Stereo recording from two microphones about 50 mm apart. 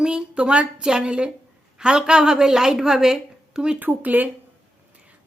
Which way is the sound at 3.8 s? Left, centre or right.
Right.